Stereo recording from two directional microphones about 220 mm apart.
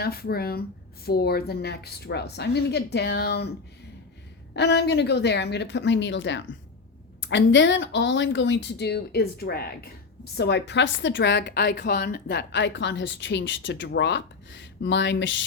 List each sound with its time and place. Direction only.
0.0 s a woman's voice: 45° left (ahead or behind)
4.5 s a woman's voice: 50° left (ahead or behind)